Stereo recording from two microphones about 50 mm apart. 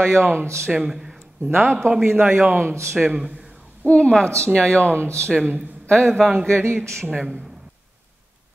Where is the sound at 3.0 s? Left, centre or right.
Centre.